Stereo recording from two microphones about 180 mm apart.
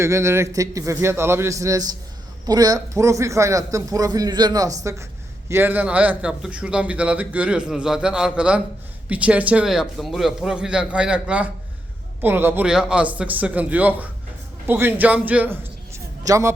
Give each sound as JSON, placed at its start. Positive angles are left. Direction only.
{"t": 0.0, "sound": "a man's voice", "side_deg": -15}